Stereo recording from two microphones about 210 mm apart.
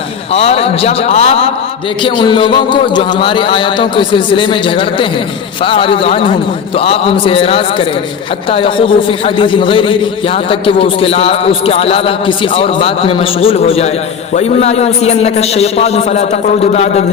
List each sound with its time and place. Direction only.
0.3 s a man's voice: 30° left (ahead or behind)